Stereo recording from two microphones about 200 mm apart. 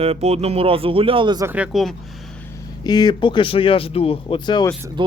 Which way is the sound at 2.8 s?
20° left (ahead or behind).